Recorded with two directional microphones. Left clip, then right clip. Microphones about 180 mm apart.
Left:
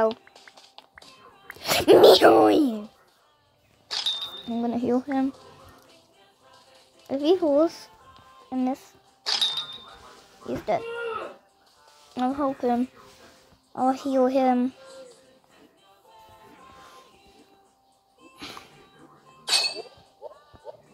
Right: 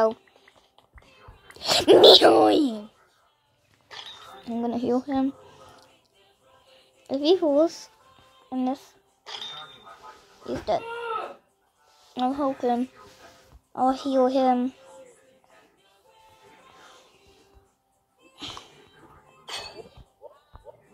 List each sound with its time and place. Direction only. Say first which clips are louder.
0.1 s a sound: left 2 dB; 35° left (ahead or behind)
1.6 s speech: even; 10° left (ahead or behind)
3.9 s a sound: left 13 dB; 35° left (ahead or behind)
4.5 s speech: even; 10° left (ahead or behind)
7.1 s speech: even; 5° left (ahead or behind)
9.2 s music: left 12 dB; 35° left (ahead or behind)
10.4 s speech: even; 10° left (ahead or behind)
12.1 s speech: even; 10° left (ahead or behind)
18.4 s music: right 2 dB; 10° left (ahead or behind)
19.4 s cough: left 12 dB; 35° left (ahead or behind)